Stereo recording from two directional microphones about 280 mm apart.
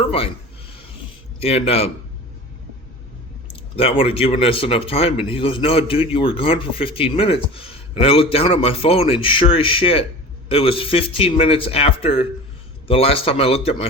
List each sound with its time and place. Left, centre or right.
1.4 s speech: left
3.5 s speech: left